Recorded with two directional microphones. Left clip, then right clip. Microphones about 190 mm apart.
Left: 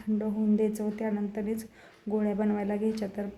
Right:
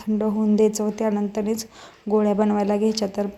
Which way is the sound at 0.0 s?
25° right (ahead or behind).